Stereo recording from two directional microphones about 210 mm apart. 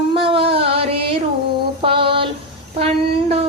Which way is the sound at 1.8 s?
25° right (ahead or behind).